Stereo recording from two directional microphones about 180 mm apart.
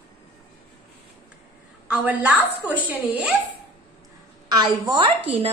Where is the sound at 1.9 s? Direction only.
5° right (ahead or behind).